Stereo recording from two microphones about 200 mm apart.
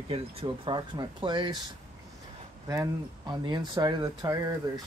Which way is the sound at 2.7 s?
20° right (ahead or behind).